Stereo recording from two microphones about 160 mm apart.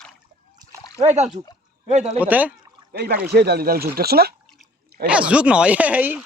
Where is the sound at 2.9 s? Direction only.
85° right.